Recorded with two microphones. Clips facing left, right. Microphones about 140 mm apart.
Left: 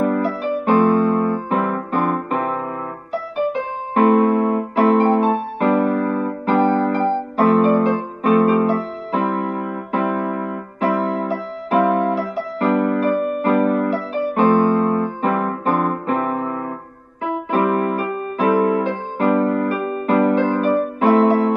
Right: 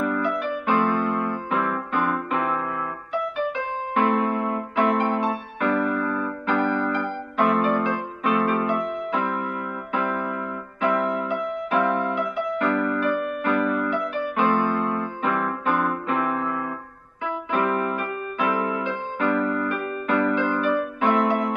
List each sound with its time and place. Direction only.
0.0 s keyboard: 40° left (ahead or behind)
8.2 s music: 40° left (ahead or behind)